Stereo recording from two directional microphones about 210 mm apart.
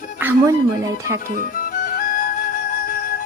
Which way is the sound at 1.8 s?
40° left (ahead or behind).